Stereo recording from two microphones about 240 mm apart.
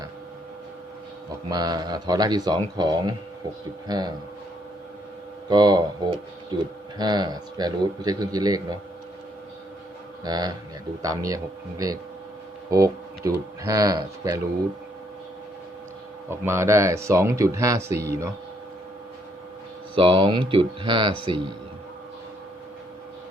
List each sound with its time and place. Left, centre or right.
1.5 s speech: centre
5.5 s speech: centre
10.2 s speech: centre
16.3 s speech: centre
20.0 s speech: right